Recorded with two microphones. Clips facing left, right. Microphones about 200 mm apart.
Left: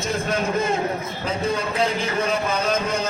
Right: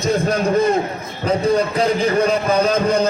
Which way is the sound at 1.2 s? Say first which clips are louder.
Right 9 dB; 35° right (ahead or behind).